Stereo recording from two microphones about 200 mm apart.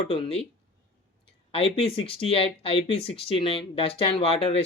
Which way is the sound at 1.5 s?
30° left (ahead or behind).